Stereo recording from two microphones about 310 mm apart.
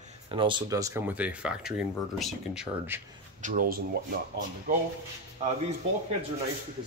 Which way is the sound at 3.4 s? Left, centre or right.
Right.